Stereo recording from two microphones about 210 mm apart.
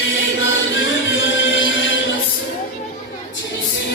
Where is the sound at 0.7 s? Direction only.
65° left (ahead or behind).